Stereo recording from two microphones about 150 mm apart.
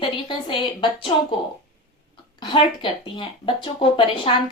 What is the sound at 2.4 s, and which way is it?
A woman's voice, 35° left (ahead or behind).